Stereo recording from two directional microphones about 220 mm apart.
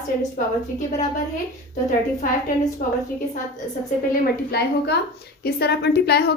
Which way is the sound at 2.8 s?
40° left (ahead or behind).